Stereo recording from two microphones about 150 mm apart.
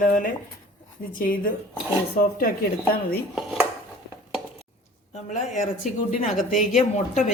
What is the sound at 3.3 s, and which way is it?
Dishes, centre (ahead or behind).